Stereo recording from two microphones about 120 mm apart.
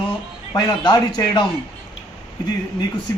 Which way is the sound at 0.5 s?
35° left (ahead or behind).